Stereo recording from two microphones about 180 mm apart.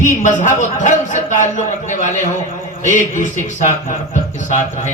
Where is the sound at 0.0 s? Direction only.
45° left (ahead or behind).